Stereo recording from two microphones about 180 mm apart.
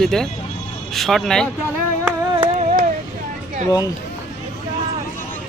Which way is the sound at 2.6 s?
45° right (ahead or behind).